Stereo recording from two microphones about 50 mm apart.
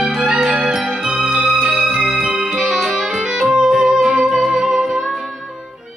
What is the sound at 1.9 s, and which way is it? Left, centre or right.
Music, centre.